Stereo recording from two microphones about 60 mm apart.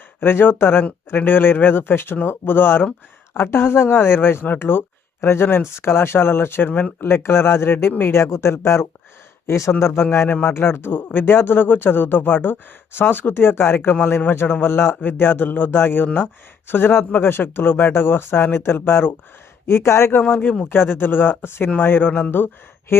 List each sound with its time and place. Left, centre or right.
0.2 s speech: left
9.8 s speech: left
19.6 s speech: left
20.4 s speech: left
20.7 s speech: left
22.9 s speech: left